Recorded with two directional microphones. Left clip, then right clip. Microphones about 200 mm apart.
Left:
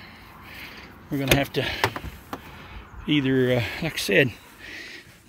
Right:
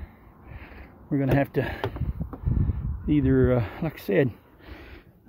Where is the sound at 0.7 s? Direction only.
20° right (ahead or behind).